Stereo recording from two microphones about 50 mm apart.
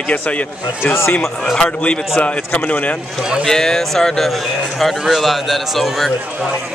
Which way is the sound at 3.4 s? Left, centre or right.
Centre.